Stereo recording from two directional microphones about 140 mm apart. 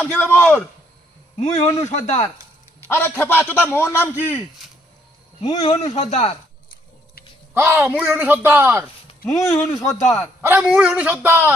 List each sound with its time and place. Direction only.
0.1 s a man's voice: 15° left (ahead or behind)
1.4 s speech: 50° left (ahead or behind)
2.8 s a man's voice: 15° left (ahead or behind)
4.4 s speech: centre (ahead or behind)
5.5 s speech: 50° left (ahead or behind)
7.5 s speech: 15° right (ahead or behind)
9.2 s speech: 20° left (ahead or behind)
10.4 s speech: 10° right (ahead or behind)